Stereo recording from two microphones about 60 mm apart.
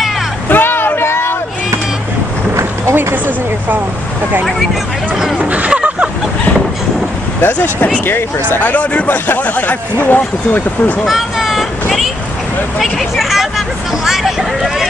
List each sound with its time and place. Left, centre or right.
0.5 s a sound: left
2.5 s vehicle: right
5.1 s speech: centre
5.4 s a sound: right
7.4 s speech: left
11.1 s vehicle: centre
12.7 s speech: centre